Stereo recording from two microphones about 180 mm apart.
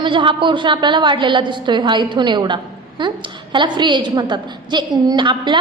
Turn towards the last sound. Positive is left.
turn(degrees=-25)  # may be behind; listen again after turning